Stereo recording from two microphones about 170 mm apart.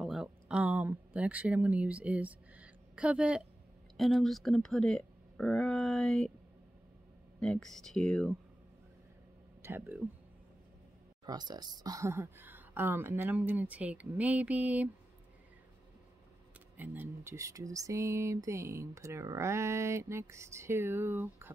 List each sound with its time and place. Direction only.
0.0 s a sound: 5° right (ahead or behind)
3.9 s speech: centre (ahead or behind)
7.3 s speech: 5° left (ahead or behind)
9.6 s speech: 10° right (ahead or behind)
11.2 s speech: 25° right (ahead or behind); by 14.9 s 10° right (ahead or behind)
16.7 s speech: 10° right (ahead or behind)